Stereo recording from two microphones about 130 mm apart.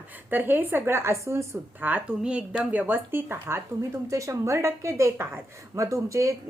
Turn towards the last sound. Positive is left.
turn(degrees=-25)  # may be behind; listen again after turning